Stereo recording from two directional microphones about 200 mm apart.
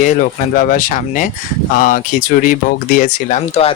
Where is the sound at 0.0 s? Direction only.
40° left (ahead or behind).